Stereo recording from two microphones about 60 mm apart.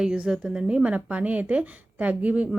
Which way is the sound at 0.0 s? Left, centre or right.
Centre.